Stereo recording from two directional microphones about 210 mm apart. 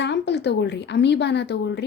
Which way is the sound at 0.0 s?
55° left (ahead or behind).